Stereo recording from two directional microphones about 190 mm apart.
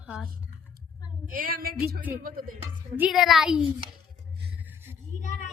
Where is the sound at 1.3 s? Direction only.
50° right (ahead or behind).